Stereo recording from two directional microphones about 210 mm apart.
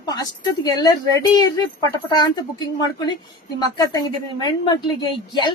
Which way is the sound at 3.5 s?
15° left (ahead or behind).